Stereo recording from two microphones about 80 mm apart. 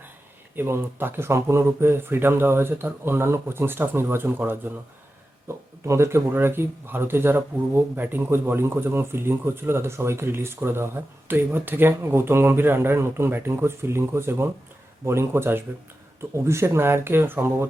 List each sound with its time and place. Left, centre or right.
0.5 s speech: right
5.8 s speech: right